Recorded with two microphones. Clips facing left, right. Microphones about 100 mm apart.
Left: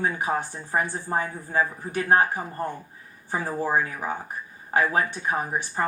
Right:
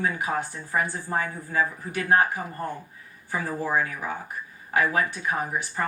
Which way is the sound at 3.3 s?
30° left (ahead or behind).